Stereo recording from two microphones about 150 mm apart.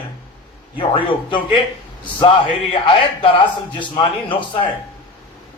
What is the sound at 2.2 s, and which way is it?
A man's voice, 35° left (ahead or behind).